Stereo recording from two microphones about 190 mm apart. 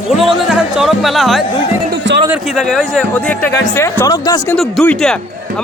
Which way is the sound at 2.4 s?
Centre (ahead or behind).